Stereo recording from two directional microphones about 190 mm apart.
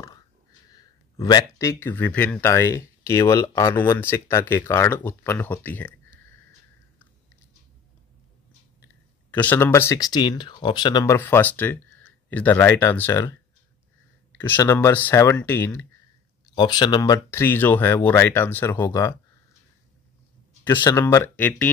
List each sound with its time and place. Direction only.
0.0 s speech: 20° left (ahead or behind)
9.3 s speech: 10° left (ahead or behind)
14.4 s speech: 10° left (ahead or behind)
16.5 s speech: 25° left (ahead or behind)
18.9 s speech: 20° left (ahead or behind)
20.6 s speech: 15° left (ahead or behind)